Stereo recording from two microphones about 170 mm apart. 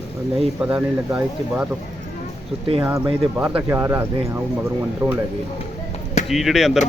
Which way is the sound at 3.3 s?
10° right (ahead or behind).